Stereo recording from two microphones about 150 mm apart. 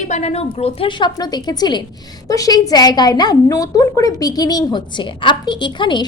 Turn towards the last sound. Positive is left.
turn(degrees=30)  # may be behind; listen again after turning